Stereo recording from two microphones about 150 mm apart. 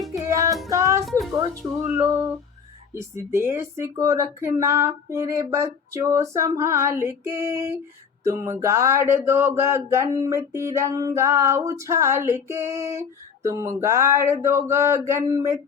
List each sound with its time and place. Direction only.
0.3 s music: 20° right (ahead or behind)
1.9 s speech: 20° right (ahead or behind)